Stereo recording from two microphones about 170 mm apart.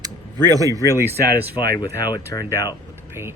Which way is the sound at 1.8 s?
25° left (ahead or behind).